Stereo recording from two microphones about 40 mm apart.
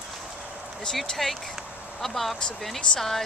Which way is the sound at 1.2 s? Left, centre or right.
Centre.